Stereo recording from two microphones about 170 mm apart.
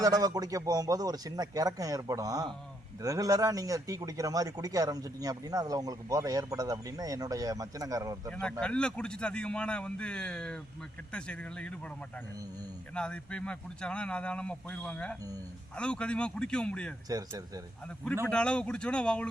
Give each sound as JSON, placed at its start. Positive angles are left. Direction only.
{"t": 0.0, "sound": "a man's voice", "side_deg": -20}
{"t": 8.3, "sound": "a man's voice", "side_deg": 5}
{"t": 12.9, "sound": "a man's voice", "side_deg": 5}
{"t": 17.1, "sound": "a man's voice", "side_deg": -20}
{"t": 18.3, "sound": "a man's voice", "side_deg": 5}